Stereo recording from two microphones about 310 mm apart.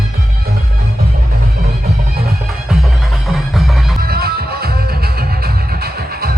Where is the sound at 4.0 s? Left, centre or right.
Right.